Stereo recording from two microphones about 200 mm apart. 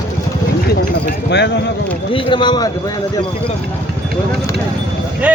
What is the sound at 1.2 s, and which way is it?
Speech, 60° left (ahead or behind).